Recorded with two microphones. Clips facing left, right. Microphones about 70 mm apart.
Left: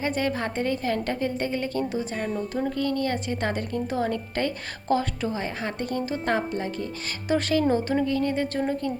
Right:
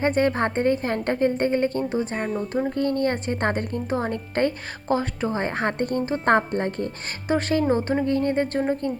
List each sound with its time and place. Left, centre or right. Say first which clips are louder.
0.0 s a woman's voice: right 5 dB; right
5.3 s a woman's voice: right 5 dB; right
7.3 s a woman's voice: right 1 dB; right
8.5 s speech: right 3 dB; right